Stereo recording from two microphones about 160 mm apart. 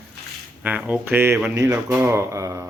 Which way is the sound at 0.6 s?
10° right (ahead or behind).